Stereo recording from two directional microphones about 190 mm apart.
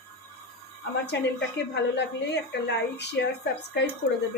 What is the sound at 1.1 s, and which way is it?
A woman's voice, 65° left (ahead or behind).